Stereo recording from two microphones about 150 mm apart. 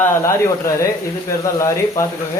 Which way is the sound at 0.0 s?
20° left (ahead or behind).